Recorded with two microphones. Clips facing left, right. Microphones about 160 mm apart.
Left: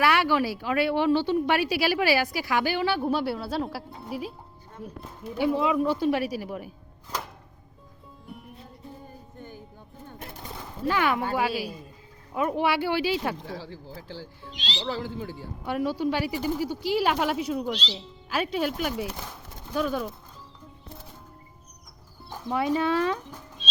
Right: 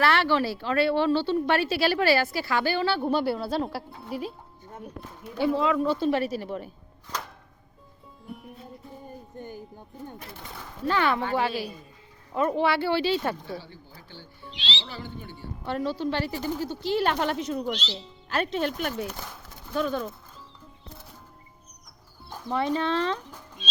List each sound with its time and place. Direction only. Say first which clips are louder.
0.0 s speech: even; 10° left (ahead or behind)
8.3 s music: right 3 dB; centre (ahead or behind)
10.6 s speech: even; 10° left (ahead or behind)
13.5 s speech: even; 90° left
14.5 s speech: left 1 dB; 40° left (ahead or behind)
14.8 s speech: left 7 dB; 90° left
15.6 s speech: left 2 dB; 10° left (ahead or behind)
22.3 s speech: left 1 dB; 10° left (ahead or behind)